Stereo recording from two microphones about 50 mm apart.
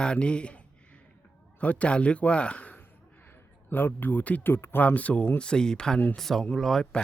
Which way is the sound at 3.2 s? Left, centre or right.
Left.